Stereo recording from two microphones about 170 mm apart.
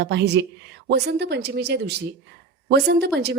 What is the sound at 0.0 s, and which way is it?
A woman's voice, 80° right.